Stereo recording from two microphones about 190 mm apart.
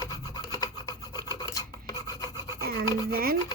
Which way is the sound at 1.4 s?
20° left (ahead or behind).